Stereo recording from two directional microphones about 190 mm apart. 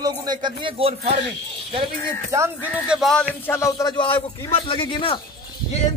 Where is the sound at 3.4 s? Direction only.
15° left (ahead or behind).